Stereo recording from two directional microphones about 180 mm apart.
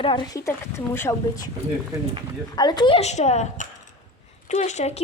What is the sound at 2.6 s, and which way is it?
A woman's voice, 25° left (ahead or behind).